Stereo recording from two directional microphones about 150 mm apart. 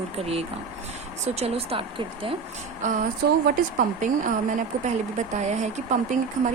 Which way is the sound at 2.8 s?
55° right (ahead or behind).